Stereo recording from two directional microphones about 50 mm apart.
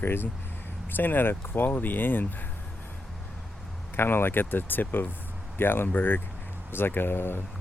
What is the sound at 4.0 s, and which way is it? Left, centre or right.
Speech, left.